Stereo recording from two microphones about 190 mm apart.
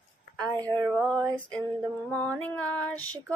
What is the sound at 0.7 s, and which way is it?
Child singing, 5° left (ahead or behind).